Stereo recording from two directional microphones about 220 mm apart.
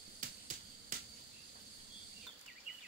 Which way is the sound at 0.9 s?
35° right (ahead or behind).